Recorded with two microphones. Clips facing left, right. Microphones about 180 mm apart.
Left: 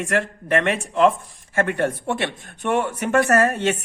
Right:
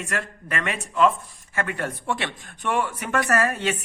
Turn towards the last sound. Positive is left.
turn(degrees=45)  # may be behind; listen again after turning